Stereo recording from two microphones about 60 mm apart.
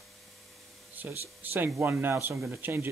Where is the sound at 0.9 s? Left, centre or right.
Right.